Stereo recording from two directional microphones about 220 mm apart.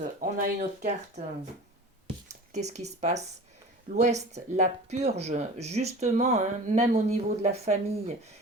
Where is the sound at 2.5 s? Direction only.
30° right (ahead or behind).